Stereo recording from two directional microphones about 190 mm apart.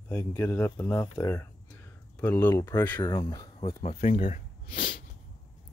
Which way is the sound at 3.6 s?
35° left (ahead or behind).